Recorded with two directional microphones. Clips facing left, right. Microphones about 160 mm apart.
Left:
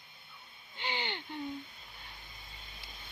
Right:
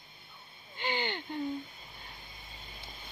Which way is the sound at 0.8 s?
45° right (ahead or behind).